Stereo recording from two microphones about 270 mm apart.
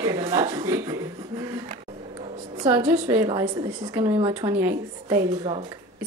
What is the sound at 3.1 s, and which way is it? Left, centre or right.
A woman's voice, centre.